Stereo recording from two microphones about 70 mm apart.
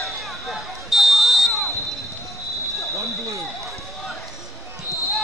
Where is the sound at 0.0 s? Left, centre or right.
Centre.